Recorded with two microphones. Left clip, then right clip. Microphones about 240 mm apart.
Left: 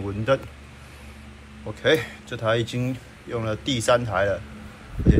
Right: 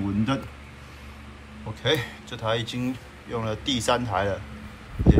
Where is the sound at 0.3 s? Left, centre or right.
Centre.